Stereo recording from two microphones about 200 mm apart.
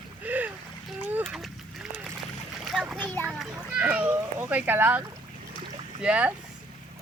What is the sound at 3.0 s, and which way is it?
Children playing, 10° left (ahead or behind).